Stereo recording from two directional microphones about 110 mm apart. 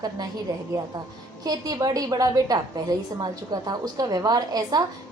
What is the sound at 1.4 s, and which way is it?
A woman's voice, 35° right (ahead or behind).